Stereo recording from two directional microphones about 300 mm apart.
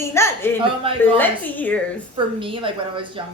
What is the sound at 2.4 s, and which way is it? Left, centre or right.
Speech, centre.